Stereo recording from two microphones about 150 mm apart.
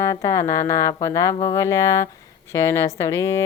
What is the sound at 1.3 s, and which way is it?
Speech, 40° left (ahead or behind).